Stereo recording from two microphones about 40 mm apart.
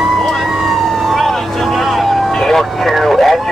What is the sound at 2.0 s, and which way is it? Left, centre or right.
Vehicle, centre.